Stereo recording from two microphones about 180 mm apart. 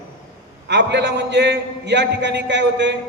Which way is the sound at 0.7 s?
75° right (ahead or behind).